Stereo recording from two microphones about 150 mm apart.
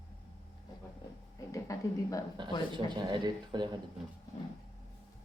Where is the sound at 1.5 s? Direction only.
20° left (ahead or behind).